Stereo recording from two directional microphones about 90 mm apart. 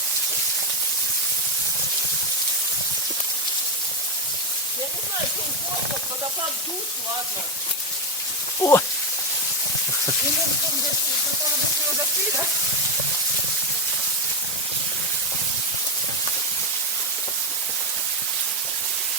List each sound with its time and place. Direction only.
8.6 s speech: 40° left (ahead or behind)